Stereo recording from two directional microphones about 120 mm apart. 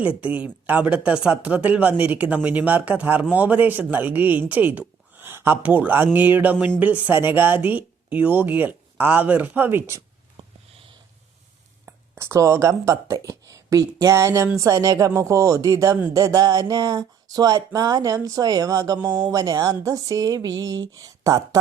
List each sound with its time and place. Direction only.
0.2 s speech: 10° right (ahead or behind)
11.9 s speech: 20° right (ahead or behind)
14.6 s a sound: 30° right (ahead or behind)